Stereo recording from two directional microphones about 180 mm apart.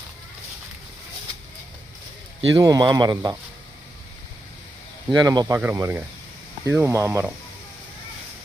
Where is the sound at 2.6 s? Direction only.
20° right (ahead or behind).